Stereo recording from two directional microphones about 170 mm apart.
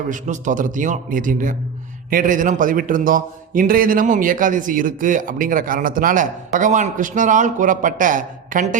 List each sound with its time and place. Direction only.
0.1 s a man's voice: 50° right (ahead or behind)